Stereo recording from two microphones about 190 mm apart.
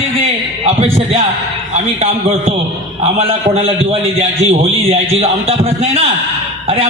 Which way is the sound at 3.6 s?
30° right (ahead or behind).